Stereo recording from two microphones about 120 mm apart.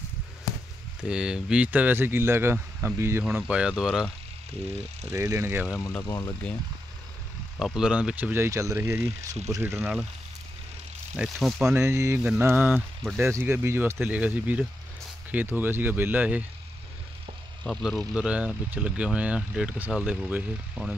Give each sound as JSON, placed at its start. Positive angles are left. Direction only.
{"t": 1.0, "sound": "speech", "side_deg": -5}
{"t": 3.3, "sound": "speech", "side_deg": -10}
{"t": 5.1, "sound": "speech", "side_deg": -30}
{"t": 5.7, "sound": "speech", "side_deg": 30}
{"t": 7.5, "sound": "speech", "side_deg": -5}
{"t": 9.7, "sound": "speech", "side_deg": 0}
{"t": 11.1, "sound": "speech", "side_deg": -5}
{"t": 11.7, "sound": "speech", "side_deg": -25}
{"t": 17.6, "sound": "speech", "side_deg": 0}